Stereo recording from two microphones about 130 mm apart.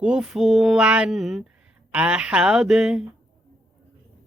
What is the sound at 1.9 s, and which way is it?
Speech, 10° right (ahead or behind).